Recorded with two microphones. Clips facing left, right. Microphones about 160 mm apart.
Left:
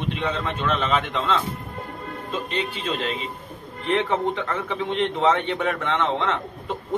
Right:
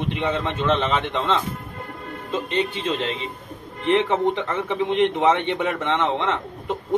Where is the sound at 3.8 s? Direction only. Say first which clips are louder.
Right 3 dB; 20° right (ahead or behind).